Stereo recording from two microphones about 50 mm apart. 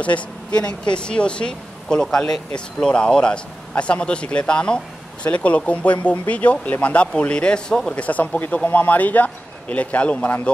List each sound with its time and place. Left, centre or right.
0.0 s speech: left
7.9 s speech: left
8.6 s a man's voice: left